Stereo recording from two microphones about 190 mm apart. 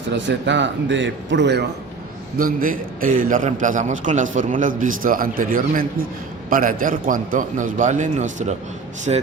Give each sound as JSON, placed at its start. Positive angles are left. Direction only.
{"t": 0.3, "sound": "a man's voice", "side_deg": -70}
{"t": 2.4, "sound": "a man's voice", "side_deg": -50}